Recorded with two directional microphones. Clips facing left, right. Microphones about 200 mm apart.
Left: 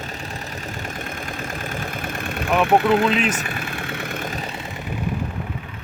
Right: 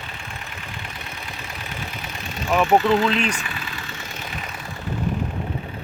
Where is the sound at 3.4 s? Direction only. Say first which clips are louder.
Left 5 dB; 55° left (ahead or behind).